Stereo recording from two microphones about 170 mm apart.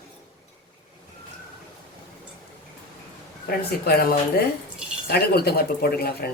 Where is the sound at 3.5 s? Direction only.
65° left (ahead or behind).